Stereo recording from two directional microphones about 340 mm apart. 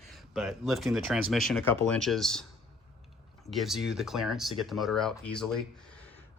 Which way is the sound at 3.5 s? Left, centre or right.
Centre.